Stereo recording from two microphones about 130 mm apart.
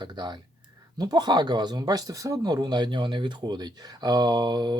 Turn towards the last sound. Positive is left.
turn(degrees=-35)  # may be behind; listen again after turning